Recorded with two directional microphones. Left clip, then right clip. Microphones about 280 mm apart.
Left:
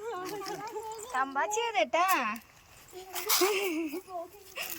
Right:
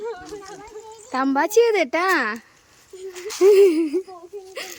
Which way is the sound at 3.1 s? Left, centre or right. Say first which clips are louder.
Right 3 dB; left.